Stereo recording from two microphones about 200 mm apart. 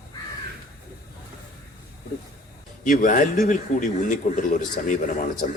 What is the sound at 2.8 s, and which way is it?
A man's voice, 40° left (ahead or behind).